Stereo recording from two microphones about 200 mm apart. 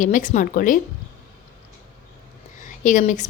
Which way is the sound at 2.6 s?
40° left (ahead or behind).